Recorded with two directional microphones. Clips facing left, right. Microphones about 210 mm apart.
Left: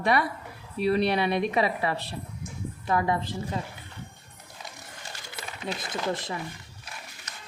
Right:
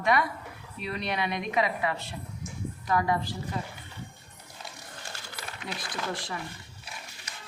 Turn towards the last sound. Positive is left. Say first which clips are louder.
# left 4 dB
turn(degrees=20)  # may be behind; listen again after turning